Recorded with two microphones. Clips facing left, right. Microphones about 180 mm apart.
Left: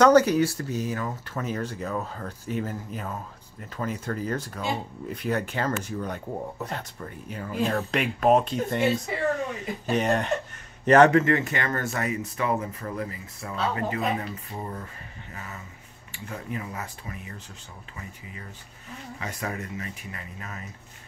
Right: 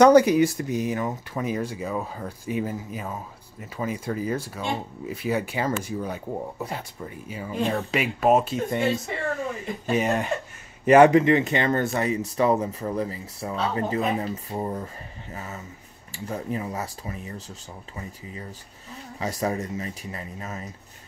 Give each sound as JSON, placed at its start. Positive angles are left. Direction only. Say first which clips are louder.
{"t": 0.0, "sound": "speech", "louder": "right 3 dB", "side_deg": -15}
{"t": 16.3, "sound": "speech", "louder": "right 5 dB", "side_deg": -35}
{"t": 19.1, "sound": "speech", "louder": "right 7 dB", "side_deg": -35}